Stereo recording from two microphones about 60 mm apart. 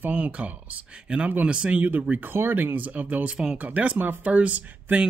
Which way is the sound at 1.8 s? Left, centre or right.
Right.